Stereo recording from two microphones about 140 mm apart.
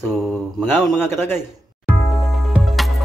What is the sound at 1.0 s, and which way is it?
Speech, 15° left (ahead or behind).